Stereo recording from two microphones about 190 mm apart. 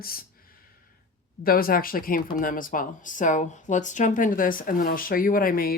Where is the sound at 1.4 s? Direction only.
50° left (ahead or behind).